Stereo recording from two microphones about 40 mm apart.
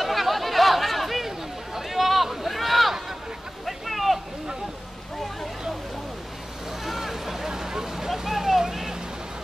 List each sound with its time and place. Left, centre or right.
0.0 s chatter: centre
3.6 s a sound: centre
6.8 s vehicle: centre